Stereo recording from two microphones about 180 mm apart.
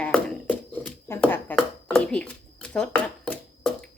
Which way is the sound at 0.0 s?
5° left (ahead or behind).